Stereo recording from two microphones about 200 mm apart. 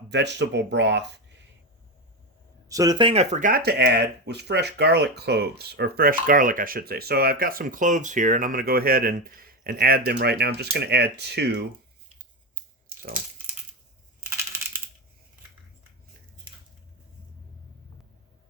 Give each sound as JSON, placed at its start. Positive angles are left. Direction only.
{"t": 0.1, "sound": "speech", "side_deg": -60}
{"t": 2.6, "sound": "speech", "side_deg": -20}
{"t": 14.3, "sound": "crushing", "side_deg": -15}